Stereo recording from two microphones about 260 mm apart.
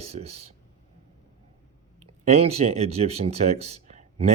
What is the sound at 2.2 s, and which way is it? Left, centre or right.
Speech, right.